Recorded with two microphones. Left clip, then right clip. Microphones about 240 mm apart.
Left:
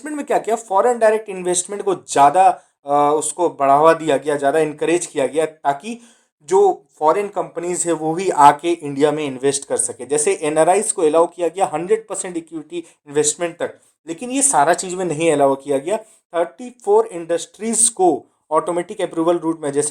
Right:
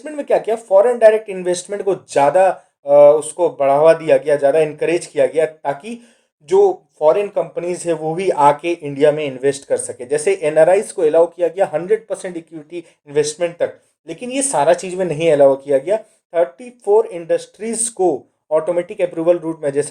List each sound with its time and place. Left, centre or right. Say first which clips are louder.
0.0 s speech: right 3 dB; left